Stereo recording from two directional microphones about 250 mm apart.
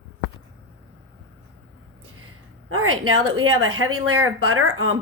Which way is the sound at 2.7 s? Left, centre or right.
Right.